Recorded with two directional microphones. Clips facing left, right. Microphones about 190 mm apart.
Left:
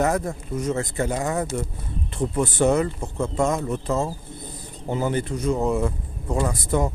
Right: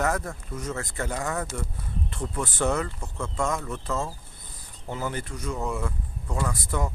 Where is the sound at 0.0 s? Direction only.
20° left (ahead or behind).